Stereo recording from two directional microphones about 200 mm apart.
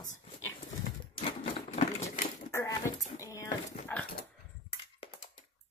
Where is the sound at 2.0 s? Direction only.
15° left (ahead or behind).